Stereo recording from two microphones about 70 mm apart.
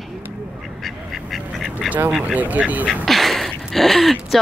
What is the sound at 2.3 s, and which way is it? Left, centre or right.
Speech, right.